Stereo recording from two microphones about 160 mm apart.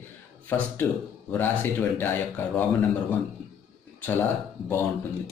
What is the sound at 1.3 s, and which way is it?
Speech, 15° left (ahead or behind).